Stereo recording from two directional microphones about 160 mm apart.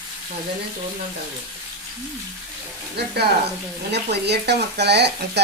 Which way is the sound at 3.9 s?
90° right.